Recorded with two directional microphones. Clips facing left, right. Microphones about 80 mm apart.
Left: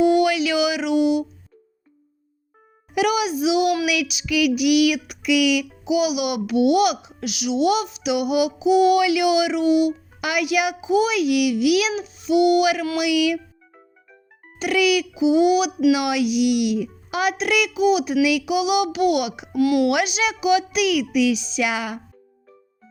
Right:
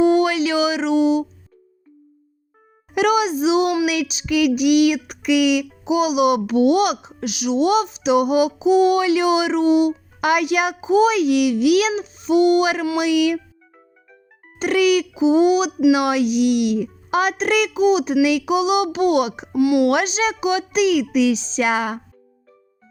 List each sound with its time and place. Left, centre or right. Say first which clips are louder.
0.0 s a sound: right 1 dB; right
2.9 s a child's voice: right 3 dB; right
14.6 s a child's voice: right 3 dB; right
19.5 s speech: right 2 dB; centre
19.9 s a child's voice: right 2 dB; right